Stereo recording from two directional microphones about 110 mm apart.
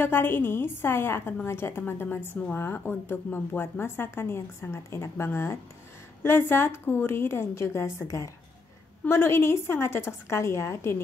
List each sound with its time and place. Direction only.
0.0 s a woman's voice: 20° left (ahead or behind)